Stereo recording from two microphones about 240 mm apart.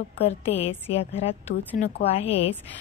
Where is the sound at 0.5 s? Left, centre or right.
Left.